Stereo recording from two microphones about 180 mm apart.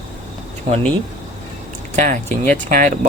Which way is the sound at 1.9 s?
45° right (ahead or behind).